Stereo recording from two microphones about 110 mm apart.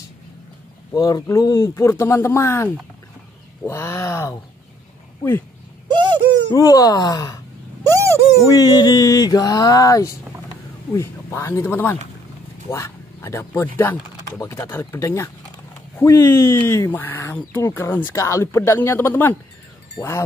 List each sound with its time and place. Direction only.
0.9 s speech: 35° left (ahead or behind)
5.9 s a sound: 45° right (ahead or behind)
6.5 s music: 35° left (ahead or behind)
7.8 s owl: 30° right (ahead or behind)
8.5 s music: 35° left (ahead or behind)
10.9 s speech: 25° left (ahead or behind)